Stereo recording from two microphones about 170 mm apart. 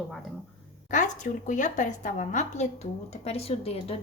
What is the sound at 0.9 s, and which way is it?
A woman's voice, 45° left (ahead or behind).